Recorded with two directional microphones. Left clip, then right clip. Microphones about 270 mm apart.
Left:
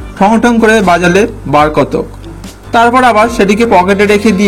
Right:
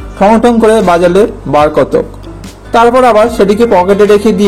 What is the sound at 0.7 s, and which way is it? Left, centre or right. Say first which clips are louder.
A man's voice: even; left.